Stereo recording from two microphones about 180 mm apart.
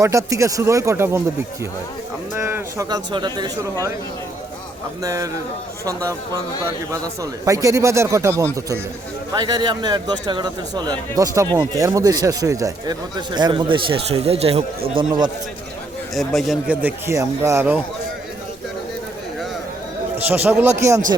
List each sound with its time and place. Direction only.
0.0 s speech: 15° right (ahead or behind)
2.3 s speech: 15° right (ahead or behind)
5.0 s speech: 20° right (ahead or behind)
16.1 s speech: centre (ahead or behind)
20.1 s speech: 10° right (ahead or behind)